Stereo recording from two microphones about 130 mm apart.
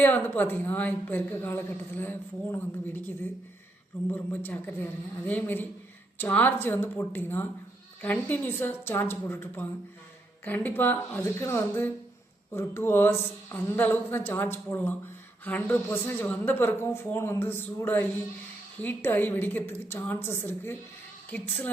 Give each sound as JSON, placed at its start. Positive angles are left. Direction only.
{"t": 0.0, "sound": "a woman's voice", "side_deg": 15}